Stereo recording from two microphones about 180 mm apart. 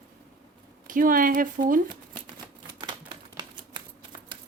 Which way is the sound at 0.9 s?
50° right (ahead or behind).